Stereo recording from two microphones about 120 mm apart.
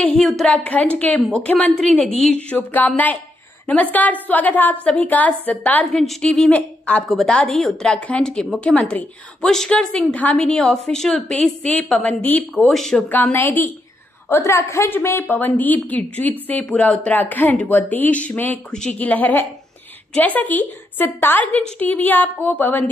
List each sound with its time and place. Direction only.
0.0 s a woman's voice: 10° left (ahead or behind)
2.5 s a woman's voice: 15° left (ahead or behind)
5.9 s a woman's voice: centre (ahead or behind)
13.1 s a woman's voice: 15° left (ahead or behind)